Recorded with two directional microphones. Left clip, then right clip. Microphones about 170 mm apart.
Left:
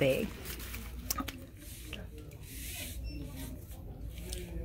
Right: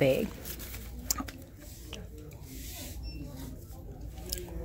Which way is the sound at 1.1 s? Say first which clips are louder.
Right 2 dB; centre (ahead or behind).